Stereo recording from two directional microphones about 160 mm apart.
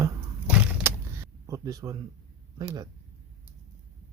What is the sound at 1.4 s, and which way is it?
Speech, 20° right (ahead or behind).